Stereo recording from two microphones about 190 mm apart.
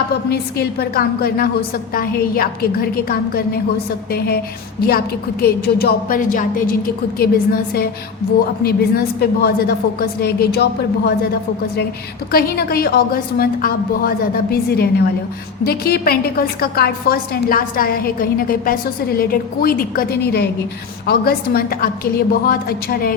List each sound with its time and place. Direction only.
0.3 s a woman's voice: 60° left (ahead or behind)
4.8 s a woman's voice: 55° left (ahead or behind)
12.3 s a woman's voice: 55° left (ahead or behind)